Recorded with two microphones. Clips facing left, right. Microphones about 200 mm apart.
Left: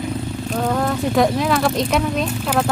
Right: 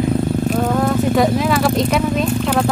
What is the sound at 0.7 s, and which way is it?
Speech, centre (ahead or behind).